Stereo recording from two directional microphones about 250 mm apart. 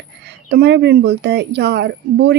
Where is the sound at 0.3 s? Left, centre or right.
Right.